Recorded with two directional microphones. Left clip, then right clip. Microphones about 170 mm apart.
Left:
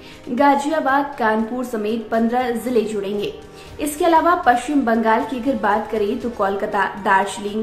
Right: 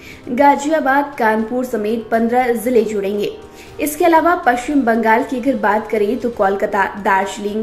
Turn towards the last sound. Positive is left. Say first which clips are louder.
# right 2 dB
turn(degrees=-15)  # may be behind; listen again after turning